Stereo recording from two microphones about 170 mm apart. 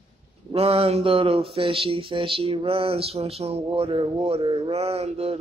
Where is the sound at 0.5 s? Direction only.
35° right (ahead or behind).